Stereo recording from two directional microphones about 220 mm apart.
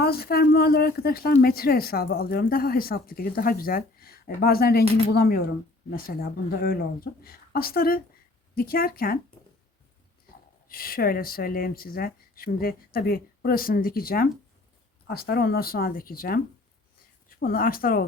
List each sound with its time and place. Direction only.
0.0 s speech: 45° left (ahead or behind)
10.7 s speech: 40° left (ahead or behind)